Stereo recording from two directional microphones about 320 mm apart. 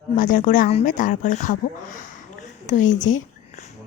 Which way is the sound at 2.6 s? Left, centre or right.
Left.